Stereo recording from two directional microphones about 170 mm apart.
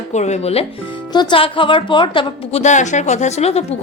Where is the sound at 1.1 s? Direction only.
25° left (ahead or behind).